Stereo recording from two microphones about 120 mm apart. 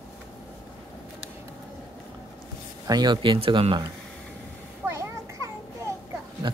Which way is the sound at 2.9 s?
35° right (ahead or behind).